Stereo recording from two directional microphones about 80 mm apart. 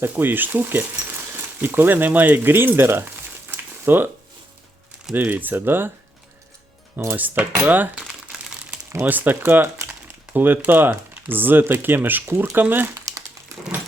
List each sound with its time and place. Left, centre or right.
0.0 s speech: right
5.1 s speech: right
7.2 s speech: right
9.0 s speech: right
12.9 s crumpling: right